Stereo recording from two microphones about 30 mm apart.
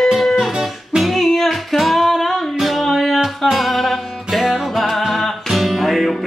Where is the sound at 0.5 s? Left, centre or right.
Centre.